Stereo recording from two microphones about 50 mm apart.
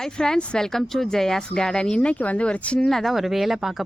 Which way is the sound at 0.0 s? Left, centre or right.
Centre.